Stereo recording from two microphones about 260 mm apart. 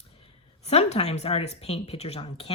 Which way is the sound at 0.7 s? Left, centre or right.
Left.